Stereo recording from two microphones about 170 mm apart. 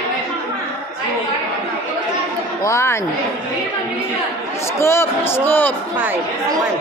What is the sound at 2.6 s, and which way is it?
Speech, 15° left (ahead or behind).